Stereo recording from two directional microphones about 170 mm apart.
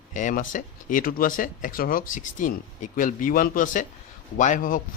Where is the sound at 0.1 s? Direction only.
45° left (ahead or behind).